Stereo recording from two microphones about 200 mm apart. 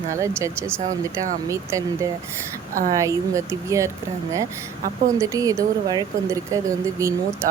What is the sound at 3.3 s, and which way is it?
Speech, 15° right (ahead or behind).